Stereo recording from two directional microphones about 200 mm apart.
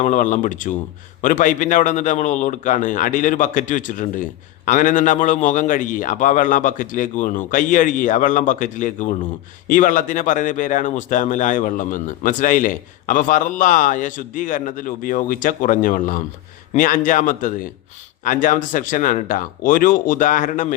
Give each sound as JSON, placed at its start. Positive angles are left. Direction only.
{"t": 0.0, "sound": "a man's voice", "side_deg": 35}